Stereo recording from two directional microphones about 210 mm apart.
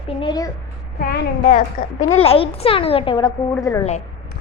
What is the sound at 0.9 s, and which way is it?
A woman's voice, 45° left (ahead or behind).